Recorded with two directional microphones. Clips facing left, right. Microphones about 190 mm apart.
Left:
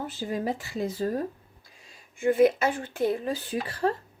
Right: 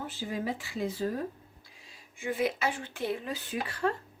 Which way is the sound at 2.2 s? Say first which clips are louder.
Left 9 dB; 50° left (ahead or behind).